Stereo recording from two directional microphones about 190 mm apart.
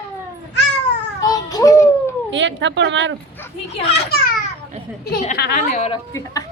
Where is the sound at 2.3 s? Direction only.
70° right (ahead or behind).